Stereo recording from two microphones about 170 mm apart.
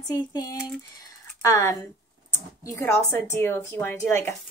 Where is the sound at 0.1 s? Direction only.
20° left (ahead or behind).